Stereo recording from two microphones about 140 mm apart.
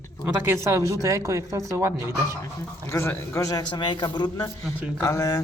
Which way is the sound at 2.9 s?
20° left (ahead or behind).